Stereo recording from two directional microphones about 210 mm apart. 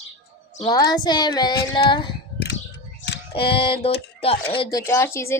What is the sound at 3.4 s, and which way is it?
Child singing, 25° left (ahead or behind).